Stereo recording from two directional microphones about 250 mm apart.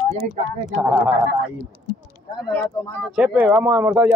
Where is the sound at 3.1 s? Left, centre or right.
Centre.